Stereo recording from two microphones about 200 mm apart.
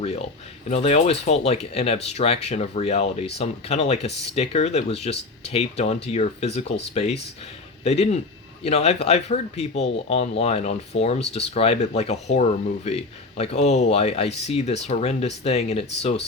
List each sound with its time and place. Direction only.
0.0 s speech: 30° left (ahead or behind)